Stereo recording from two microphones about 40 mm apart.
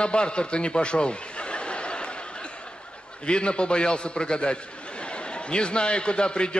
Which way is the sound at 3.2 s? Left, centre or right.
Left.